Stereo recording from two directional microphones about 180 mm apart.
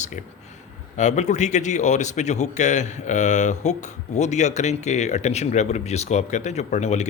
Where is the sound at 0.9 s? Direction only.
40° left (ahead or behind).